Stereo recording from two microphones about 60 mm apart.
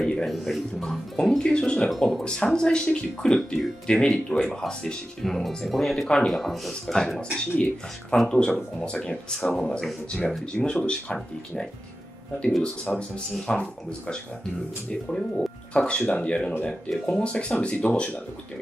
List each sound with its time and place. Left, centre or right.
0.0 s music: centre
0.3 s speech: centre
1.9 s speech: centre
2.2 s speech: centre
13.1 s speech: centre